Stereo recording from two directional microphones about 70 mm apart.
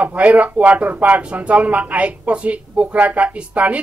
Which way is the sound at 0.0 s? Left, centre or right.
Centre.